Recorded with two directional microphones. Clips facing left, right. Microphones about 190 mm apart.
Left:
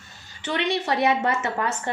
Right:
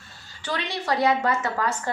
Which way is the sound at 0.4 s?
25° left (ahead or behind).